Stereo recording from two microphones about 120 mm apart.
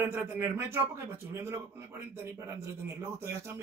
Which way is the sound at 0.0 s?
15° right (ahead or behind).